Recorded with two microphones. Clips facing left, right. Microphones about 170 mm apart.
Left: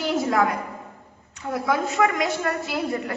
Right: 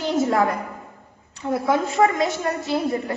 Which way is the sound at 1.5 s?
30° right (ahead or behind).